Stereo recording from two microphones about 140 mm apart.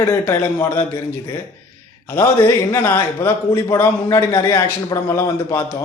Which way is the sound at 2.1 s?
20° left (ahead or behind).